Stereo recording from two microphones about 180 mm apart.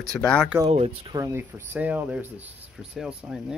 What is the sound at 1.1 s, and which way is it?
Speech, 15° right (ahead or behind).